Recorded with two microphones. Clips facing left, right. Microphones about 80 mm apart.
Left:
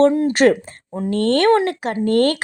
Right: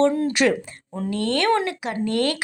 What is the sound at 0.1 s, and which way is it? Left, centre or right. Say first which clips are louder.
Speech: left 5 dB; left.